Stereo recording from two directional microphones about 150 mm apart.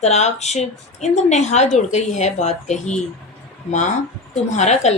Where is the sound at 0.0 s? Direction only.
50° left (ahead or behind).